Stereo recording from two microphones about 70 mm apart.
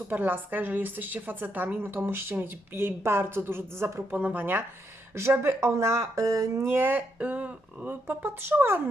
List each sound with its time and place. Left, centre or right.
0.1 s a woman's voice: right
4.2 s a woman's voice: right
5.1 s speech: right